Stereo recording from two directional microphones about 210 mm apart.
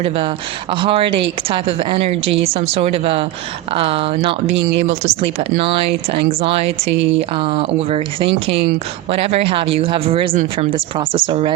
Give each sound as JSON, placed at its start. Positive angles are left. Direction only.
{"t": 0.0, "sound": "speech", "side_deg": -25}
{"t": 4.5, "sound": "speech", "side_deg": -55}
{"t": 4.9, "sound": "speech", "side_deg": -30}